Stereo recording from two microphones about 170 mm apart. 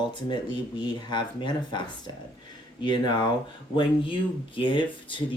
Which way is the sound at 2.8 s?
25° left (ahead or behind).